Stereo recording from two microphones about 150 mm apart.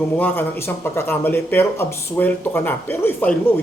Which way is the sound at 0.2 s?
15° left (ahead or behind).